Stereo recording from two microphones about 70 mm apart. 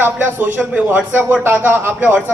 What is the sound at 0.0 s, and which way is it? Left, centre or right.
A man's voice, right.